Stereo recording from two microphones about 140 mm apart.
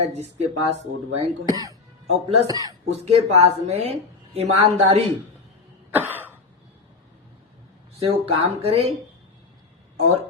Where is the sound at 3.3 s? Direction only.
50° right (ahead or behind).